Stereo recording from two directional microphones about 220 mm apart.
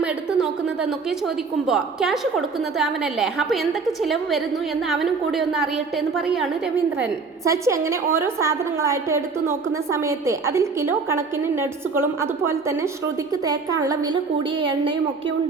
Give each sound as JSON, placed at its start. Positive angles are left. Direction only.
{"t": 0.0, "sound": "a sound", "side_deg": -5}
{"t": 1.6, "sound": "a woman's voice", "side_deg": 0}
{"t": 7.0, "sound": "a woman's voice", "side_deg": -15}